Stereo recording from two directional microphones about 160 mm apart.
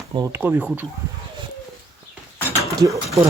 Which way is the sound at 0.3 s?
10° right (ahead or behind).